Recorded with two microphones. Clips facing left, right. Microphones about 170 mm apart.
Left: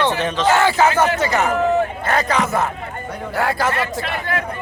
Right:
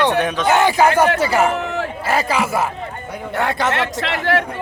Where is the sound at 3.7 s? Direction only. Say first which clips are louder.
Right 2 dB; 80° right.